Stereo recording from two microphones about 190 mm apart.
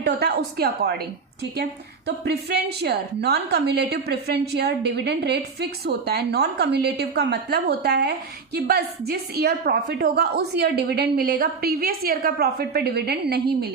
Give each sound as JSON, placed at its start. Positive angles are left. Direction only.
{"t": 0.0, "sound": "a woman's voice", "side_deg": -55}
{"t": 2.0, "sound": "a woman's voice", "side_deg": -60}